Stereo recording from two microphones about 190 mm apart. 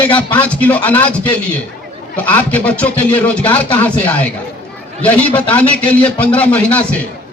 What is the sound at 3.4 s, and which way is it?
Speech, 25° left (ahead or behind).